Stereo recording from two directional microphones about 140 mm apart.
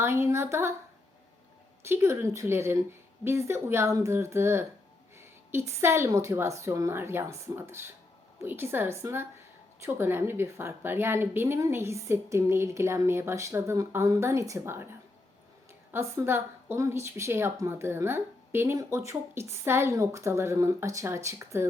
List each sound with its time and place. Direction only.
0.0 s a woman's voice: 20° right (ahead or behind)
1.8 s a woman's voice: 20° right (ahead or behind)
15.9 s a woman's voice: 20° right (ahead or behind)